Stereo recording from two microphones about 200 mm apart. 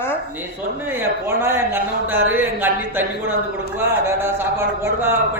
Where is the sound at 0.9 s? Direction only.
10° right (ahead or behind).